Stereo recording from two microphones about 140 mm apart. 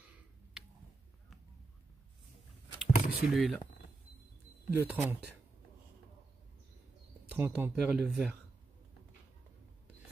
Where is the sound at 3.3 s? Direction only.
Centre (ahead or behind).